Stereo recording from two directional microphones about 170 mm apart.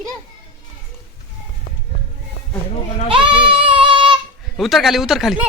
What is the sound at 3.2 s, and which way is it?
Child singing, 30° right (ahead or behind).